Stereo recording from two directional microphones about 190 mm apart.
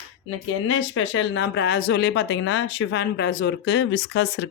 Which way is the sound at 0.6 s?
90° left.